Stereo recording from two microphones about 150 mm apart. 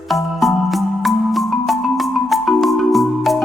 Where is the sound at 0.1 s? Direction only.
Centre (ahead or behind).